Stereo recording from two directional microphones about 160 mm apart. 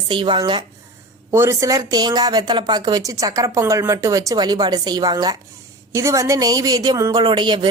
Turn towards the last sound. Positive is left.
turn(degrees=-30)  # may be behind; listen again after turning